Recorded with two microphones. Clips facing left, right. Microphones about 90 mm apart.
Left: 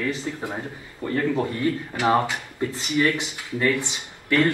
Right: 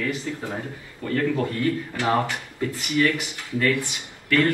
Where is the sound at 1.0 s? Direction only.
20° left (ahead or behind).